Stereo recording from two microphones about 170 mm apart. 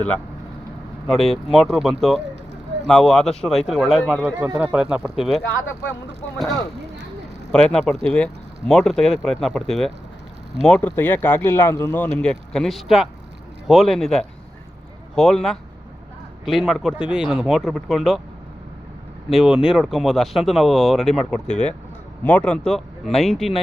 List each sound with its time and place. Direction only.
1.0 s speech: centre (ahead or behind)
7.5 s speech: 5° left (ahead or behind)
19.3 s speech: 5° right (ahead or behind)
21.4 s speech: 45° left (ahead or behind)
22.2 s speech: 10° left (ahead or behind)